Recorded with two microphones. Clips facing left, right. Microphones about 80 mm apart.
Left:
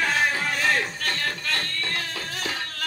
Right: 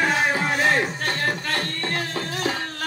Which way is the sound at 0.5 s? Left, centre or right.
Right.